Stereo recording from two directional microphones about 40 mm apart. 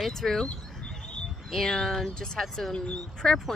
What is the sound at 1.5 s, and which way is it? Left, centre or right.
Speech, centre.